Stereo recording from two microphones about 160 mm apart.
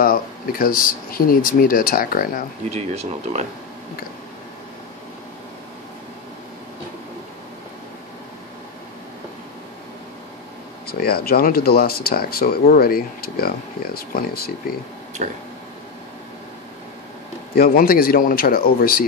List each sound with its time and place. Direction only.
0.0 s speech: 65° left (ahead or behind)
2.7 s speech: 45° right (ahead or behind)
10.9 s speech: 75° left (ahead or behind)
17.6 s speech: 65° left (ahead or behind)